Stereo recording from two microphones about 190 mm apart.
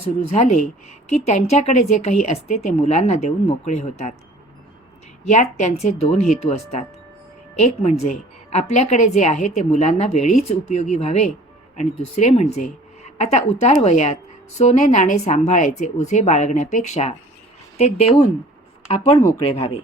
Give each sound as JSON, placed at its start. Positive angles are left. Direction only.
{"t": 0.0, "sound": "a woman's voice", "side_deg": 35}
{"t": 5.2, "sound": "a woman's voice", "side_deg": 40}